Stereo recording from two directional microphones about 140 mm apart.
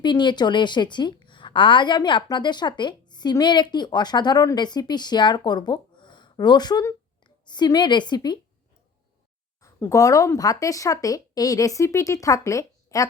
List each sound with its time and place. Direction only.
0.0 s a woman's voice: 35° left (ahead or behind)
9.6 s speech: 20° left (ahead or behind)